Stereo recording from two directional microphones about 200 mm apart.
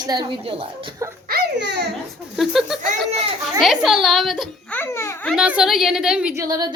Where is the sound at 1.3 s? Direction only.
55° right (ahead or behind).